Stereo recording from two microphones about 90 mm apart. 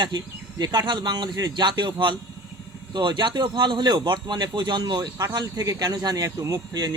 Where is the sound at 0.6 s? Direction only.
50° right (ahead or behind).